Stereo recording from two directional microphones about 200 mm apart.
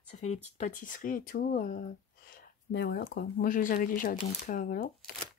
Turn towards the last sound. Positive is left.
turn(degrees=45)  # may be behind; listen again after turning